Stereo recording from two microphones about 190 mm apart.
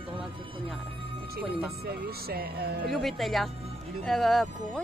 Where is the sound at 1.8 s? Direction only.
55° right (ahead or behind).